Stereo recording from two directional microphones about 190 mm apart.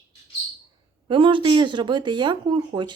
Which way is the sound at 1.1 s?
25° right (ahead or behind).